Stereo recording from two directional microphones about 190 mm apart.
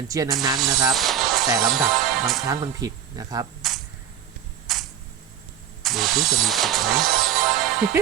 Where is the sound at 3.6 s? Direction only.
Centre (ahead or behind).